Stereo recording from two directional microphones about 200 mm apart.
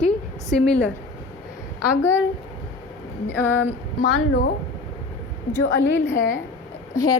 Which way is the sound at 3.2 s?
10° left (ahead or behind).